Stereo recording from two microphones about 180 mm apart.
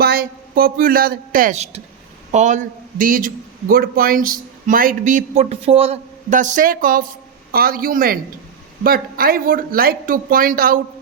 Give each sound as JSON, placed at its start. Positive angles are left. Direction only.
{"t": 0.0, "sound": "a man's voice", "side_deg": -55}